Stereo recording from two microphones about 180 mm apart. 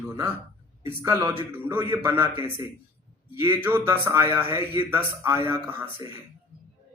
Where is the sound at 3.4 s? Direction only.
10° right (ahead or behind).